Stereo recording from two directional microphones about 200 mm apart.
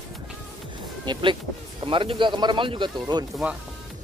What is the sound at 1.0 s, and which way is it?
Speech, 25° right (ahead or behind).